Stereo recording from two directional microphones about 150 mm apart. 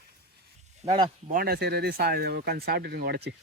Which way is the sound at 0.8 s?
45° right (ahead or behind).